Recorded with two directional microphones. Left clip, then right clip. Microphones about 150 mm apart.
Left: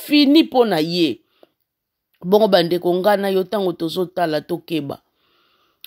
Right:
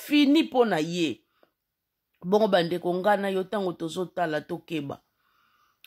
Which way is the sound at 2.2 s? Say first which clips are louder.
Left 8 dB; 35° left (ahead or behind).